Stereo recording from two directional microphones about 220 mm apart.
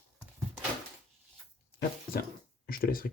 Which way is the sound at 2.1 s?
45° left (ahead or behind).